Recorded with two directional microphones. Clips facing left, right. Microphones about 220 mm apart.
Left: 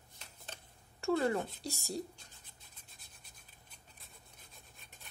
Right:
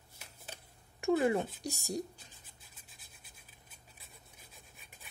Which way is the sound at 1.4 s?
15° right (ahead or behind).